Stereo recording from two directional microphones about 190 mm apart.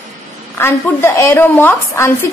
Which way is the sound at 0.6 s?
10° left (ahead or behind).